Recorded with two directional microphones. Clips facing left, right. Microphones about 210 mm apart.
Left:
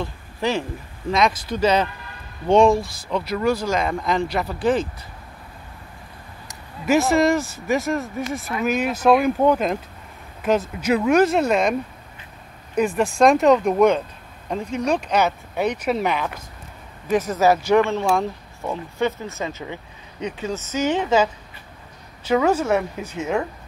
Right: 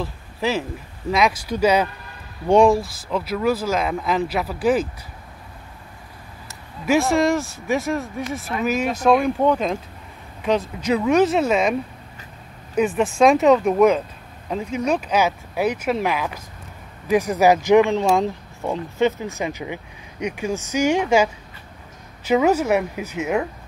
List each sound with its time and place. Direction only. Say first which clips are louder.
0.0 s speech: even; 5° right (ahead or behind)
6.9 s speech: left 1 dB; centre (ahead or behind)
12.7 s speech: right 1 dB; 5° right (ahead or behind)
17.1 s speech: right 2 dB; 15° right (ahead or behind)
22.3 s speech: right 1 dB; 10° right (ahead or behind)